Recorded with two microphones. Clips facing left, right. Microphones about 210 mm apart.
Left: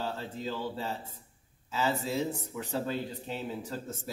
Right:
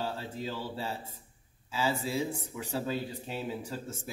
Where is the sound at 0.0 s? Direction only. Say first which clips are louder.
Even; 10° right (ahead or behind).